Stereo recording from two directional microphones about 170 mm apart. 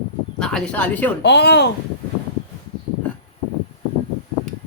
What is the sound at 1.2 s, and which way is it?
Speech, 80° left.